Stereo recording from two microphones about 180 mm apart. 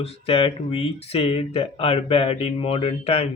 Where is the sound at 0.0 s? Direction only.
30° left (ahead or behind).